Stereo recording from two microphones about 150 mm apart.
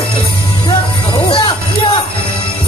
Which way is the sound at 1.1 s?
35° left (ahead or behind).